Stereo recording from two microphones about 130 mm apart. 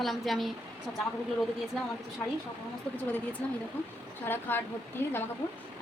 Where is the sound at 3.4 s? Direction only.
10° left (ahead or behind).